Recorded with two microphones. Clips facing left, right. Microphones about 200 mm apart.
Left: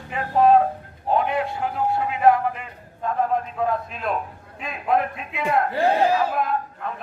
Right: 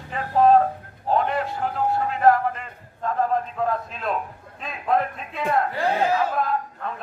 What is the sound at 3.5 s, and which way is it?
A man's voice, 5° left (ahead or behind).